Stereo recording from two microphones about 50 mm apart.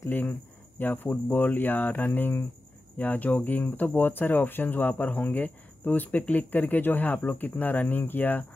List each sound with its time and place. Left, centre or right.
0.1 s speech: left